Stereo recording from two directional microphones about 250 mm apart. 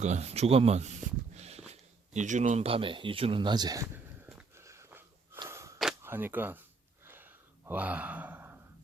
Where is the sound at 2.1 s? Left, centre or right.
Right; by 4.0 s centre.